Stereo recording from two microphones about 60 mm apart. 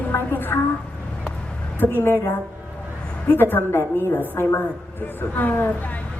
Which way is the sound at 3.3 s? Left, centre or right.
Left.